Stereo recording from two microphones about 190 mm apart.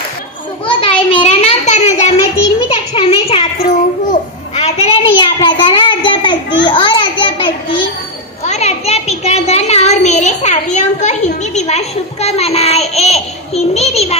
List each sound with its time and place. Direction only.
0.7 s a sound: 25° left (ahead or behind)
6.6 s children playing: 25° left (ahead or behind)
8.5 s a child's voice: 35° left (ahead or behind)